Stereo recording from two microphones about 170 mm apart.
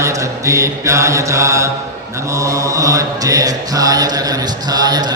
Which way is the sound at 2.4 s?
20° right (ahead or behind).